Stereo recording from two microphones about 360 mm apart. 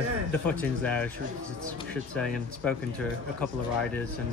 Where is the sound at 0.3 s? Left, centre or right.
Centre.